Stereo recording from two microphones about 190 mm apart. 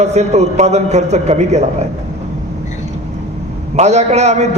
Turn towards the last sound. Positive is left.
turn(degrees=-35)  # may be behind; listen again after turning